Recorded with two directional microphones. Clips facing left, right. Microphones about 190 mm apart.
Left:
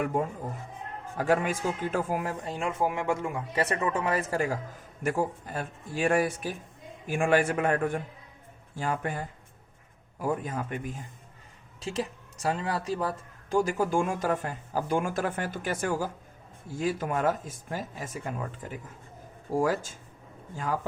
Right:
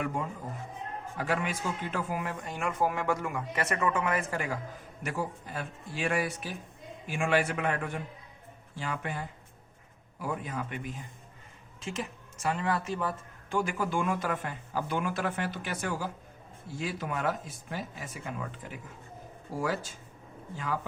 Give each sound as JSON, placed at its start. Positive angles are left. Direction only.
{"t": 0.0, "sound": "speech", "side_deg": 50}